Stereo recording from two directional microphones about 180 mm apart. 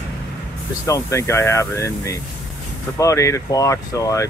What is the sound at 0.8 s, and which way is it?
Speech, 15° left (ahead or behind).